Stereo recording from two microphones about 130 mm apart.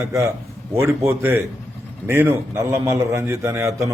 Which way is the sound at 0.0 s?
20° right (ahead or behind).